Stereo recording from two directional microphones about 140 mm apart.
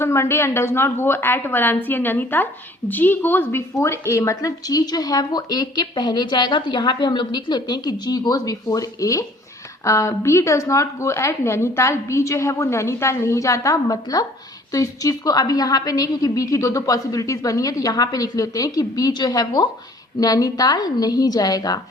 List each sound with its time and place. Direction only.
0.0 s a woman's voice: 20° left (ahead or behind)